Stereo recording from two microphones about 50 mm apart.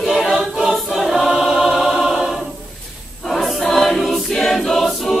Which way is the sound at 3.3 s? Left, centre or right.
Centre.